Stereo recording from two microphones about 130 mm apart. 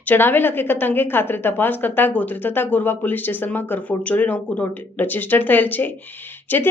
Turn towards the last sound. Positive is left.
turn(degrees=15)  # may be behind; listen again after turning